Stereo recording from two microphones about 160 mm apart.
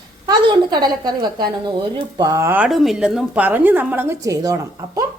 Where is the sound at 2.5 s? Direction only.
5° right (ahead or behind).